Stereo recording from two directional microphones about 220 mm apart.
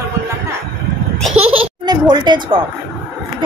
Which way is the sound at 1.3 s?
25° right (ahead or behind).